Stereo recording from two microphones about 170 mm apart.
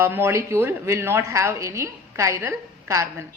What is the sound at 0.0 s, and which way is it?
Speech, 15° right (ahead or behind).